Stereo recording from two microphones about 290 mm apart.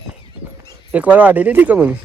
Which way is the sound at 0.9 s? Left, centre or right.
Centre.